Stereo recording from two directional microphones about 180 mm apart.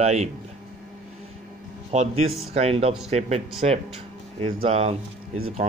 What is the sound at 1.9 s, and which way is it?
Speech, 40° right (ahead or behind).